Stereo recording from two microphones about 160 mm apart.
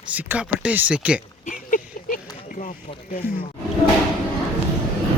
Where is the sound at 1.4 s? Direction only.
55° left (ahead or behind).